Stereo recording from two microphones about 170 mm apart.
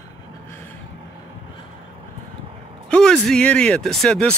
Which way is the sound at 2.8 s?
5° left (ahead or behind).